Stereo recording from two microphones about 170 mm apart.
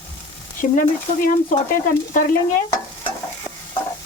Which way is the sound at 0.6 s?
55° left (ahead or behind).